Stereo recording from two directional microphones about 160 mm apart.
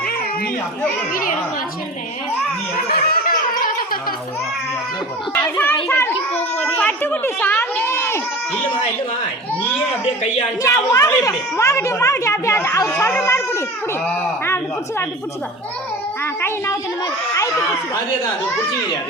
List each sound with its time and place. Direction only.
1.1 s speech: 60° left (ahead or behind)
2.7 s a sound: 70° left (ahead or behind)
5.3 s a woman's voice: 15° left (ahead or behind)
10.6 s a woman's voice: 20° left (ahead or behind)
16.2 s speech: 15° left (ahead or behind)